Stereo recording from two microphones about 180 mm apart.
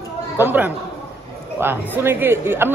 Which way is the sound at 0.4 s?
10° right (ahead or behind).